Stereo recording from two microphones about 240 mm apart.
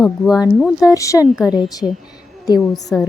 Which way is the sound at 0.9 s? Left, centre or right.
Centre.